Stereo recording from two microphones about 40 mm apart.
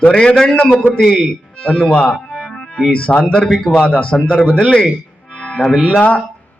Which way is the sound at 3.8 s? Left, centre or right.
Left.